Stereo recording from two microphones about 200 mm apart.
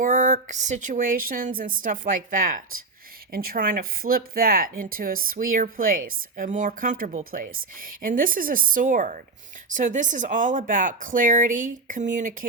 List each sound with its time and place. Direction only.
0.0 s speech: 40° right (ahead or behind)